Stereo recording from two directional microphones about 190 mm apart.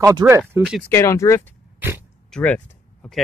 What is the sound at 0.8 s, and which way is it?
Speech, 15° left (ahead or behind).